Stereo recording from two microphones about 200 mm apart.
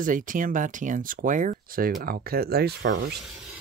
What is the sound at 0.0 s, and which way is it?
Speech, 40° right (ahead or behind).